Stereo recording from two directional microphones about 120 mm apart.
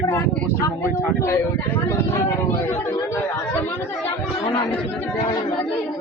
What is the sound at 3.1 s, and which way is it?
Chatter, 15° left (ahead or behind).